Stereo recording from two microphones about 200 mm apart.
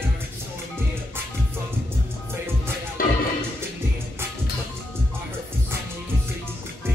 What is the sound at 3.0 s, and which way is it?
Music, 45° left (ahead or behind).